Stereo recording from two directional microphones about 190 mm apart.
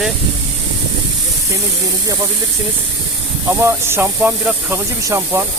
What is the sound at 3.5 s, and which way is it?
Speech, 15° right (ahead or behind).